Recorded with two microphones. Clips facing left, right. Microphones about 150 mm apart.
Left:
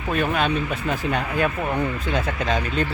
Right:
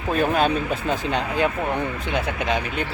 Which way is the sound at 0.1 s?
35° right (ahead or behind).